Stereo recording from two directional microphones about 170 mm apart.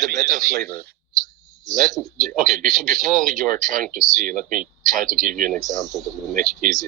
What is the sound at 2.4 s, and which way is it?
Speech, 55° right (ahead or behind).